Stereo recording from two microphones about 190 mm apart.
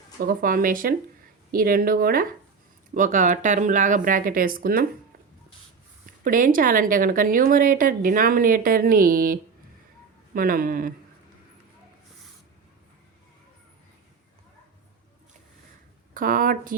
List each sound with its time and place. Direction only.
0.3 s speech: 45° right (ahead or behind)
6.1 s speech: 45° right (ahead or behind)
16.1 s speech: 45° right (ahead or behind)